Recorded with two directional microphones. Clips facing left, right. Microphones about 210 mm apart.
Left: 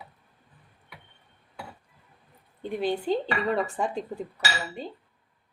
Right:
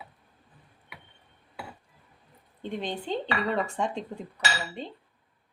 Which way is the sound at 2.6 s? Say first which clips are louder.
Left 5 dB; 5° left (ahead or behind).